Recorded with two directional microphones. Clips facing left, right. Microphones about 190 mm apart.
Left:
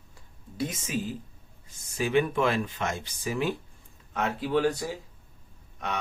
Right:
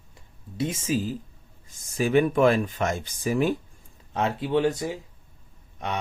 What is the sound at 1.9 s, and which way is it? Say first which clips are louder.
Speech: right 4 dB; 45° right (ahead or behind).